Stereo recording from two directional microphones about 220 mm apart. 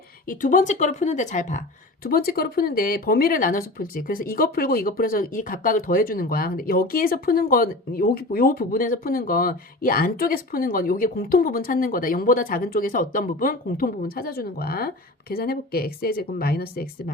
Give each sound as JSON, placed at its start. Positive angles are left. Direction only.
{"t": 0.3, "sound": "speech", "side_deg": 40}